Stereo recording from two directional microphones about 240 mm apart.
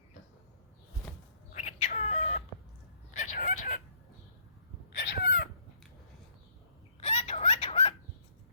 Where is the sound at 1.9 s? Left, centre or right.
Left.